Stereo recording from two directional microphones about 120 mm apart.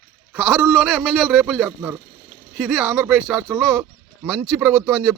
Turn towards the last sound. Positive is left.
turn(degrees=-15)  # may be behind; listen again after turning